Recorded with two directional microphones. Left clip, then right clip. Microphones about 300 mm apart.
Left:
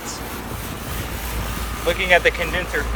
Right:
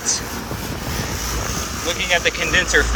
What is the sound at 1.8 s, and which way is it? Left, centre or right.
Speech, left.